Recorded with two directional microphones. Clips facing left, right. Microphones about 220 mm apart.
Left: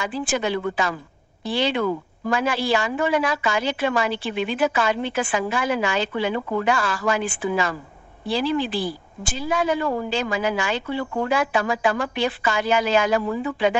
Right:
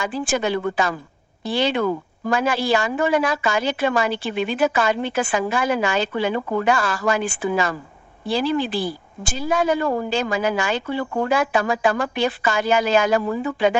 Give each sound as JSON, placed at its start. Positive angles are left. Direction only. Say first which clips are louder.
{"t": 0.0, "sound": "a woman's voice", "louder": "right 2 dB", "side_deg": -45}